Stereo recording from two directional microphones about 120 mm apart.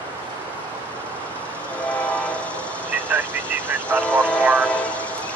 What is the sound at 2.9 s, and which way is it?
Vehicle, 15° right (ahead or behind).